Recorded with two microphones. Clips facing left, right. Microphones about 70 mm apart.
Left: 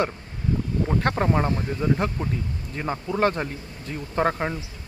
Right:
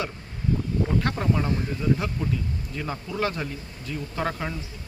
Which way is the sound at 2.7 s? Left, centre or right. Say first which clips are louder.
Left 5 dB; left.